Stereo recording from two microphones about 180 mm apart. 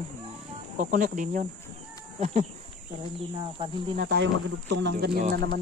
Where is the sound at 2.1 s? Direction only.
40° right (ahead or behind).